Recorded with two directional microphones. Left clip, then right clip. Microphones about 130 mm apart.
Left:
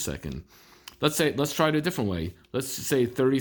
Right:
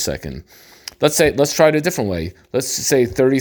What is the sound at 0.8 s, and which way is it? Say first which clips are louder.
Speech: right 10 dB; 40° right (ahead or behind).